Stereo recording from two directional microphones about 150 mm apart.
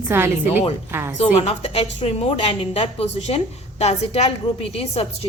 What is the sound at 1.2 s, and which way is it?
A woman's voice, 40° left (ahead or behind).